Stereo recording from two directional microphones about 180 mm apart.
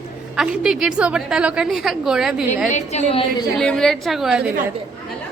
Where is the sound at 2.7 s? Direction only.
40° left (ahead or behind).